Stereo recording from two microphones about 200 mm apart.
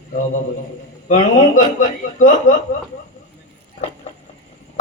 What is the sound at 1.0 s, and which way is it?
A man's voice, 40° left (ahead or behind).